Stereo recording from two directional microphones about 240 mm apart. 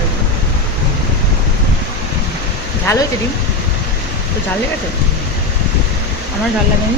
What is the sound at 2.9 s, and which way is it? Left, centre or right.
Speech, centre.